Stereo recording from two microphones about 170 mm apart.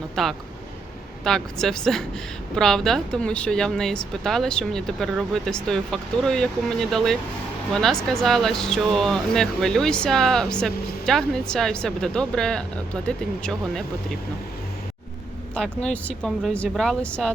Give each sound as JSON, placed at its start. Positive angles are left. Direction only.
{"t": 0.2, "sound": "speech", "side_deg": 0}
{"t": 15.5, "sound": "speech", "side_deg": 5}